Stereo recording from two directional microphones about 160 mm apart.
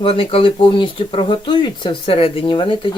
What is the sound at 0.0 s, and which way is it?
Speech, 35° left (ahead or behind).